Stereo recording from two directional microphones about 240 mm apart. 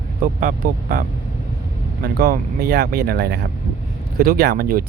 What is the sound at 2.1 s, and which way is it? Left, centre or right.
Speech, right.